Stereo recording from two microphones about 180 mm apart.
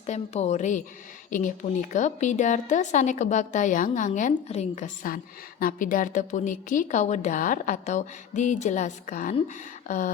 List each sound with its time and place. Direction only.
0.0 s a woman's voice: 35° left (ahead or behind)